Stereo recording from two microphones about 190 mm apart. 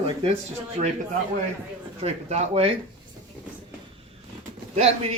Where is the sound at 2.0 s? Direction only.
35° right (ahead or behind).